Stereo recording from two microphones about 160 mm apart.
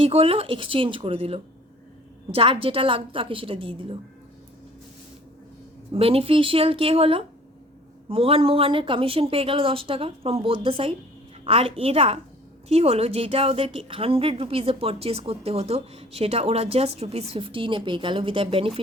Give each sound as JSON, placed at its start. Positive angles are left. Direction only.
{"t": 0.0, "sound": "a woman's voice", "side_deg": -35}
{"t": 5.9, "sound": "a woman's voice", "side_deg": -35}